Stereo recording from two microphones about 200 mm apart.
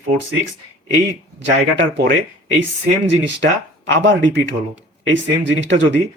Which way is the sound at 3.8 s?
65° right (ahead or behind).